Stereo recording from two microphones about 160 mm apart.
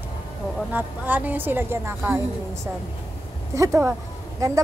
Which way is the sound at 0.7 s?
10° right (ahead or behind).